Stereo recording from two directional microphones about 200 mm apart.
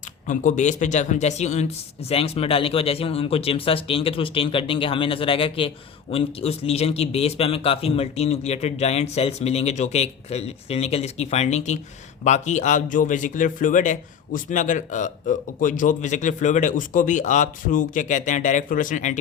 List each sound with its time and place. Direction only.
0.3 s speech: 40° left (ahead or behind)